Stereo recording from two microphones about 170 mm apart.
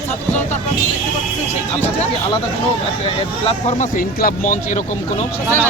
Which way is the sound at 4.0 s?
60° left (ahead or behind).